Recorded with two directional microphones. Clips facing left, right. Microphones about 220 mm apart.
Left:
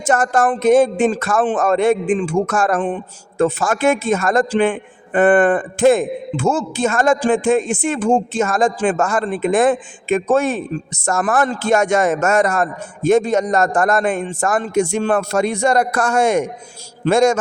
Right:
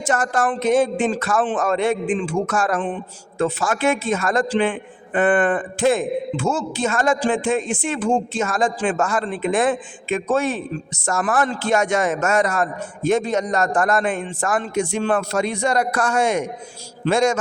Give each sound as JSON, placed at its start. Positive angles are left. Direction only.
{"t": 0.0, "sound": "a man's voice", "side_deg": 45}